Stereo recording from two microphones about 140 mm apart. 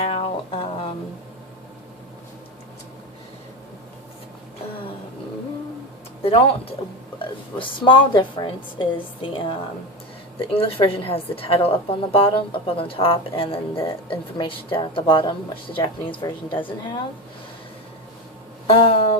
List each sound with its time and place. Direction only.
0.0 s music: 40° left (ahead or behind)
6.2 s a woman's voice: 45° left (ahead or behind)
18.7 s a woman's voice: 40° left (ahead or behind)